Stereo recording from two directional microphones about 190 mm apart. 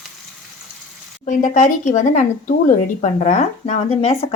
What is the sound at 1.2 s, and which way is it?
Speech, 40° left (ahead or behind).